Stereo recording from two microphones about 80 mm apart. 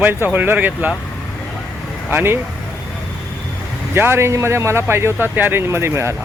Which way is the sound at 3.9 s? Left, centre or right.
Right.